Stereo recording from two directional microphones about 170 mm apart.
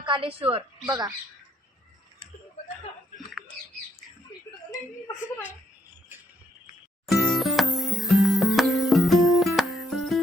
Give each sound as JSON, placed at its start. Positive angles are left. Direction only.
{"t": 0.0, "sound": "a woman's voice", "side_deg": -30}
{"t": 2.6, "sound": "chuckle", "side_deg": 40}
{"t": 7.1, "sound": "music", "side_deg": 0}